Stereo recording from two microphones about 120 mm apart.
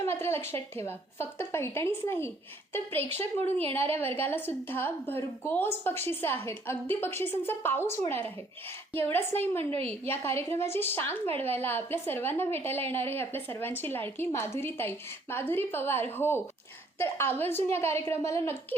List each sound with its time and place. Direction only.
0.0 s a woman's voice: 20° left (ahead or behind)